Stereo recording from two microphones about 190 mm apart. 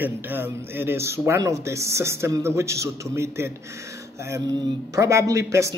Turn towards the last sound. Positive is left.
turn(degrees=-15)  # may be behind; listen again after turning